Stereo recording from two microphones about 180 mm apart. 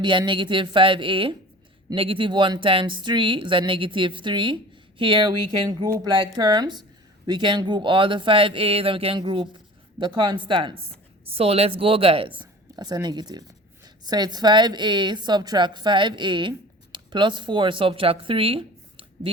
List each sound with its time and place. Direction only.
0.0 s a woman's voice: 25° right (ahead or behind)